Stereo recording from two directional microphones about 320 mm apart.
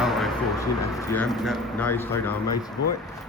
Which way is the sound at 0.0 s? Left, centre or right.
Centre.